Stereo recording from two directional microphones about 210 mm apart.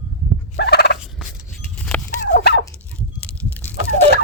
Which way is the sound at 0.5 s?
50° left (ahead or behind).